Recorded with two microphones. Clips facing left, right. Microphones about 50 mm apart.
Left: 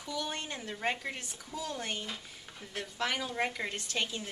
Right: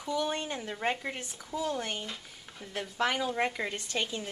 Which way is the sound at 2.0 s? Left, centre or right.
Centre.